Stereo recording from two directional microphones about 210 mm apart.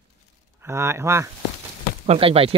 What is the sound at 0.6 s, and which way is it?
Speech, 10° right (ahead or behind).